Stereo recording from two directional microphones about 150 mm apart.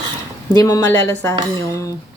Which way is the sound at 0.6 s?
20° left (ahead or behind).